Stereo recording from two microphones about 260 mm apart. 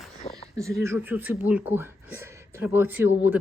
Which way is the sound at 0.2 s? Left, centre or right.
Left.